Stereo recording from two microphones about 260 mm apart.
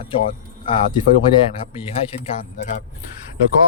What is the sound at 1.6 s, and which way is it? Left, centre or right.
Speech, left.